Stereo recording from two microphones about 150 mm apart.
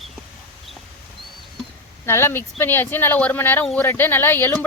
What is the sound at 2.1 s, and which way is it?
Speech, 15° left (ahead or behind).